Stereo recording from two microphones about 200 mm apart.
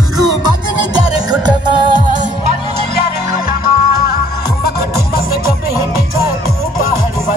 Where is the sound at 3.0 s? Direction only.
50° left (ahead or behind).